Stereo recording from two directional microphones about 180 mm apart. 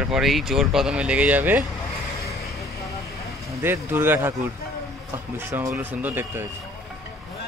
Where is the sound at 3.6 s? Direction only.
10° right (ahead or behind).